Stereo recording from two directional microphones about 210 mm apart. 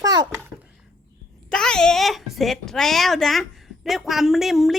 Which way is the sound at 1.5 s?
5° left (ahead or behind).